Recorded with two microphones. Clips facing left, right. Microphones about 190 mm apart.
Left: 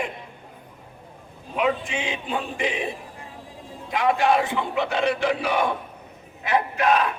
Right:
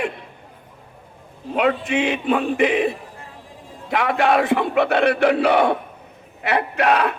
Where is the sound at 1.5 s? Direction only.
70° right (ahead or behind).